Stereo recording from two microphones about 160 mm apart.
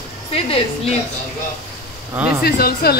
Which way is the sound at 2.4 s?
80° left.